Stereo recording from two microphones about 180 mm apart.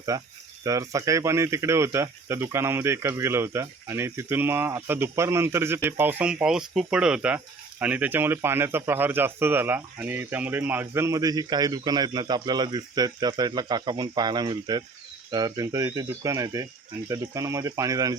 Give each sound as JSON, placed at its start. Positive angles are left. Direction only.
{"t": 0.1, "sound": "speech", "side_deg": -20}